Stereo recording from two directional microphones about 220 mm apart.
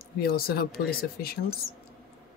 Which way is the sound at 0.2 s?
45° left (ahead or behind).